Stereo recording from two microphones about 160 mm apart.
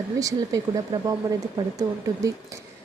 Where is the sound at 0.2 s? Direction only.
20° right (ahead or behind).